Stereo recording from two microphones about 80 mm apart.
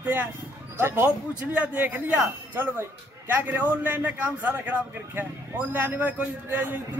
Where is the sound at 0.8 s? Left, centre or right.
Right.